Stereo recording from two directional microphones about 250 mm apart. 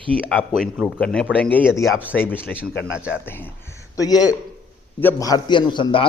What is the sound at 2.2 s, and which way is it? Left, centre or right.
A man's voice, centre.